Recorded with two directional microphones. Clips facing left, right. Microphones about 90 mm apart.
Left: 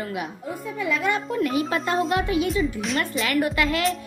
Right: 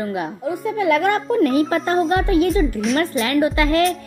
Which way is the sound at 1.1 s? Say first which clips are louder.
Right 7 dB; 40° right (ahead or behind).